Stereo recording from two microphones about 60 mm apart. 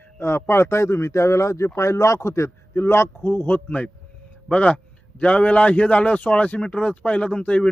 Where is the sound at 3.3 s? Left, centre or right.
Left.